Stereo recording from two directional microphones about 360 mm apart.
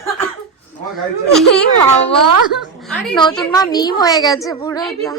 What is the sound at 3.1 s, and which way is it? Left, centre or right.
A woman's voice, centre.